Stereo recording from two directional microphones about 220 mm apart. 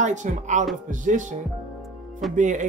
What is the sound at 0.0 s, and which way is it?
Speech, 35° right (ahead or behind).